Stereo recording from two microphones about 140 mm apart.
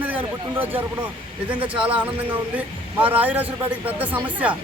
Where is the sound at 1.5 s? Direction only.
40° right (ahead or behind).